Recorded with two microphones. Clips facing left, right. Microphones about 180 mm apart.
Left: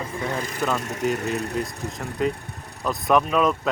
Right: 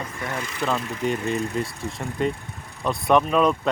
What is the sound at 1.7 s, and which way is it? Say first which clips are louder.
Speech: even; 40° left (ahead or behind).